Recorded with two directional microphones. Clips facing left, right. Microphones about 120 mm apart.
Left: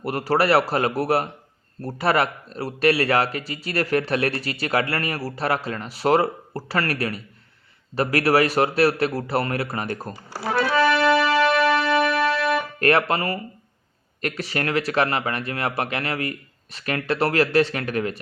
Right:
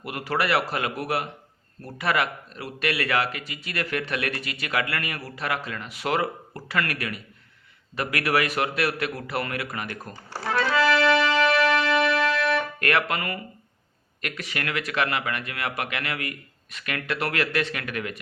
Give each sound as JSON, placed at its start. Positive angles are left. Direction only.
{"t": 0.0, "sound": "speech", "side_deg": 35}
{"t": 10.2, "sound": "speech", "side_deg": 10}
{"t": 11.3, "sound": "music", "side_deg": 25}
{"t": 12.8, "sound": "speech", "side_deg": 30}